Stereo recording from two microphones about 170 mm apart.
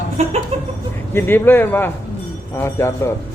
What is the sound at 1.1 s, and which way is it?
A man's voice, 15° left (ahead or behind).